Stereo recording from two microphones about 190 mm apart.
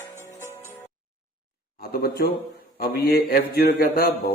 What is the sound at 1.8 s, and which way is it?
A man's voice, 50° left (ahead or behind).